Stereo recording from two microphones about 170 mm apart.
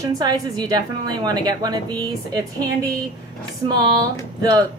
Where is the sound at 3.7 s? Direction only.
25° right (ahead or behind).